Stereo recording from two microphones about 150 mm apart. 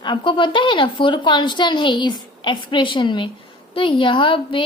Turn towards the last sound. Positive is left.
turn(degrees=35)  # may be behind; listen again after turning